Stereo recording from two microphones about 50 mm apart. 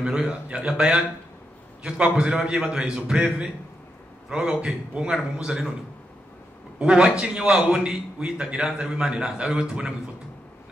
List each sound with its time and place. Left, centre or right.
0.0 s a man's voice: centre
4.3 s a man's voice: centre
6.8 s a man's voice: centre